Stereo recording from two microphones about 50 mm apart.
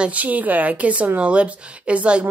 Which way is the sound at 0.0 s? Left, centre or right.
Right.